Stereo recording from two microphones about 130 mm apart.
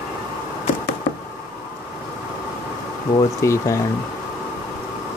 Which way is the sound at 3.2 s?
25° left (ahead or behind).